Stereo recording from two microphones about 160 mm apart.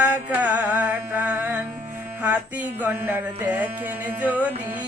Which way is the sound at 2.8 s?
10° right (ahead or behind).